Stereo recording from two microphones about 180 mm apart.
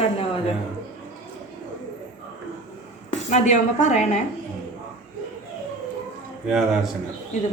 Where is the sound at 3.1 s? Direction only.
40° left (ahead or behind).